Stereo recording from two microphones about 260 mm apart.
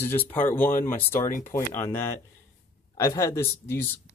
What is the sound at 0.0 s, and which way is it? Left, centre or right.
Speech, centre.